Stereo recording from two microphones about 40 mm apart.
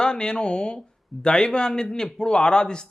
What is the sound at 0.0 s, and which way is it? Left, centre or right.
A man's voice, left.